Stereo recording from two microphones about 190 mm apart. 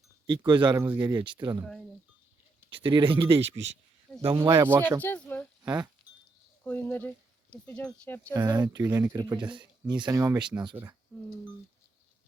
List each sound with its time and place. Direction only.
0.3 s speech: 25° right (ahead or behind)
2.6 s speech: 25° right (ahead or behind)
4.4 s speech: 15° right (ahead or behind)
4.9 s speech: 10° left (ahead or behind)
5.6 s speech: 20° right (ahead or behind)
6.7 s speech: 10° left (ahead or behind)
8.3 s speech: 15° right (ahead or behind)
9.4 s speech: 5° right (ahead or behind)
9.8 s speech: 20° right (ahead or behind)